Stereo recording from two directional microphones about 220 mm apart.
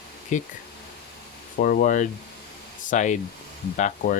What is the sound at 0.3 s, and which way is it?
Speech, 35° left (ahead or behind).